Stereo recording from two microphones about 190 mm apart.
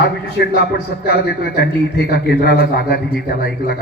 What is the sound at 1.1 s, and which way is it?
A man's voice, 55° left (ahead or behind).